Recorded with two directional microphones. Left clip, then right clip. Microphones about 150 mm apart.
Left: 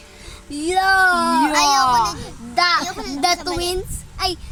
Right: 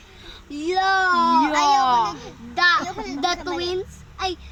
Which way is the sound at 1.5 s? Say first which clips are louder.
Left 2 dB; 25° right (ahead or behind).